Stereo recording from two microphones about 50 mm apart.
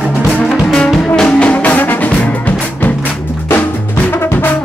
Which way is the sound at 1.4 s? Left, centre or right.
Left.